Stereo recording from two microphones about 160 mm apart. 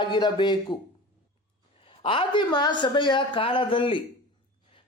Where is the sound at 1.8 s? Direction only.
35° left (ahead or behind).